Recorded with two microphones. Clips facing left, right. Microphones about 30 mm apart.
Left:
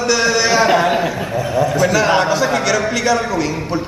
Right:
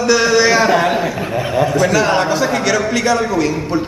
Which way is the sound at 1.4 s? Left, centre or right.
Right.